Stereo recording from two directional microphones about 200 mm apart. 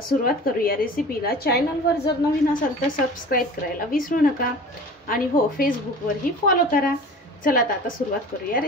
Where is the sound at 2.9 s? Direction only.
45° left (ahead or behind).